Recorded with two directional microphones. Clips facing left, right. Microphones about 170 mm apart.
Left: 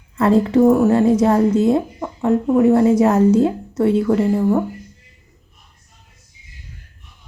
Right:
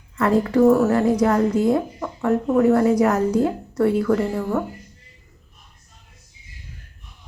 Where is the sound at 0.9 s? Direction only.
25° left (ahead or behind).